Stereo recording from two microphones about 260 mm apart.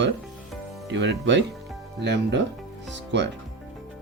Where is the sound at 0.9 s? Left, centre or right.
Right.